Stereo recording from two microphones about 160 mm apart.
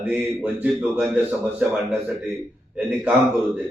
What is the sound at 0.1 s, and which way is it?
A man's voice, 10° right (ahead or behind).